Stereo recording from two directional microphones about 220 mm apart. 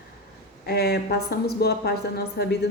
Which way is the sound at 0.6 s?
50° left (ahead or behind).